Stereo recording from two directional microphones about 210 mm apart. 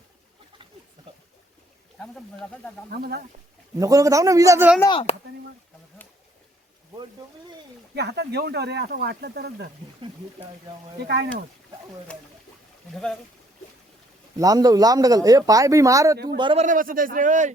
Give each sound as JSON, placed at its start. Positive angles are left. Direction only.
{"t": 2.0, "sound": "speech", "side_deg": 5}
{"t": 2.9, "sound": "speech", "side_deg": -50}
{"t": 3.8, "sound": "a man's voice", "side_deg": -15}
{"t": 4.8, "sound": "speech", "side_deg": 25}
{"t": 7.9, "sound": "speech", "side_deg": -50}
{"t": 11.0, "sound": "speech", "side_deg": -50}
{"t": 12.1, "sound": "speech", "side_deg": 5}
{"t": 14.3, "sound": "a man's voice", "side_deg": -15}
{"t": 16.6, "sound": "a man's voice", "side_deg": -40}